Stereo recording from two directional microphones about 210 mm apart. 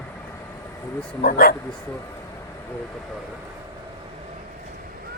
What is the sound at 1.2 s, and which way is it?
Speech, 45° left (ahead or behind).